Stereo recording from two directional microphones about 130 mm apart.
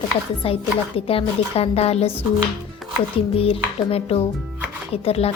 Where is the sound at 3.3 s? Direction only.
45° left (ahead or behind).